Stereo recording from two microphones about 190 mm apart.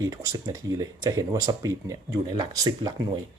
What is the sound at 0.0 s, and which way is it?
Speech, 15° right (ahead or behind).